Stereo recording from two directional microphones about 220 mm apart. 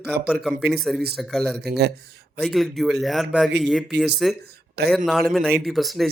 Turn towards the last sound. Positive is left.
turn(degrees=0)  # may be behind; listen again after turning